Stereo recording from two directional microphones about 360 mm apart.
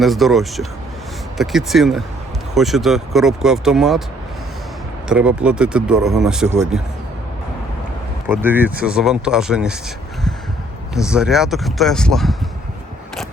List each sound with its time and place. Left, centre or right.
0.0 s speech: centre
5.0 s speech: centre
8.3 s speech: centre
10.9 s speech: centre